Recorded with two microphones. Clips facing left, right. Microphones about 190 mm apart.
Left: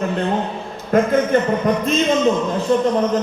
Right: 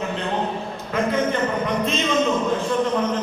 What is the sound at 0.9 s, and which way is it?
Speech, 45° left (ahead or behind).